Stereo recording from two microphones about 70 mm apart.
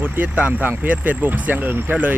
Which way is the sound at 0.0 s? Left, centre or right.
Right.